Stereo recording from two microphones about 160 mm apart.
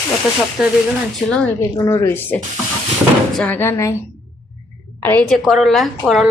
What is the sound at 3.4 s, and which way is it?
Speech, 10° left (ahead or behind).